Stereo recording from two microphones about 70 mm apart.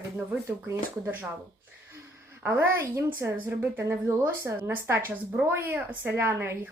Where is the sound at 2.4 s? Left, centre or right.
Right.